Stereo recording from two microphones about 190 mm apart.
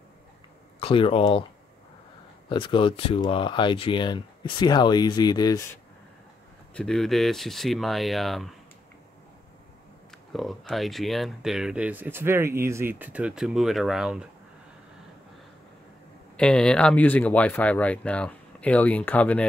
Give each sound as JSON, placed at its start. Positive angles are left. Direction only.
{"t": 0.7, "sound": "speech", "side_deg": 30}
{"t": 2.5, "sound": "speech", "side_deg": 25}
{"t": 6.7, "sound": "speech", "side_deg": 5}
{"t": 10.3, "sound": "speech", "side_deg": 0}
{"t": 16.3, "sound": "speech", "side_deg": 5}